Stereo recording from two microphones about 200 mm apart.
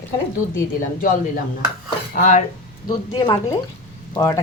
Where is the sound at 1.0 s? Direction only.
45° left (ahead or behind).